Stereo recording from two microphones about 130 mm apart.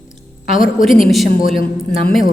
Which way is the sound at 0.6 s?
Centre (ahead or behind).